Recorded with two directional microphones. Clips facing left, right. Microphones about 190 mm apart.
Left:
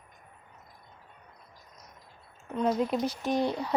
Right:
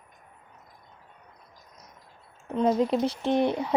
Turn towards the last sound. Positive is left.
turn(degrees=-20)  # may be behind; listen again after turning